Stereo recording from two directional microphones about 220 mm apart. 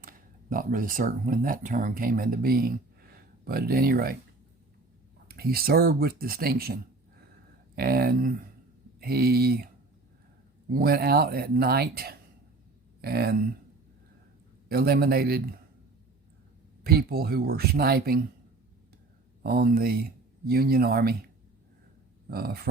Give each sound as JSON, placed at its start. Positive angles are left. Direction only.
{"t": 0.5, "sound": "speech", "side_deg": -40}
{"t": 5.3, "sound": "speech", "side_deg": -45}
{"t": 7.8, "sound": "speech", "side_deg": -40}
{"t": 10.7, "sound": "speech", "side_deg": -40}
{"t": 14.7, "sound": "speech", "side_deg": -45}
{"t": 16.8, "sound": "speech", "side_deg": -45}
{"t": 19.4, "sound": "speech", "side_deg": -45}
{"t": 22.3, "sound": "speech", "side_deg": -45}